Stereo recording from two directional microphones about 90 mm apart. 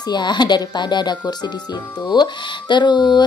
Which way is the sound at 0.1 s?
55° left (ahead or behind).